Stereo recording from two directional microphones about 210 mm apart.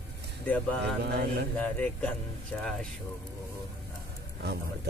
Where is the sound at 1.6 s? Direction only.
5° left (ahead or behind).